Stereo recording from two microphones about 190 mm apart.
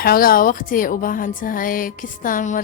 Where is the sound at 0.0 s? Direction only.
50° left (ahead or behind).